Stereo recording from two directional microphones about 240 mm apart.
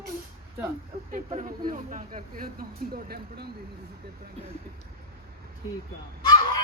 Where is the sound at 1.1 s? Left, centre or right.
Right.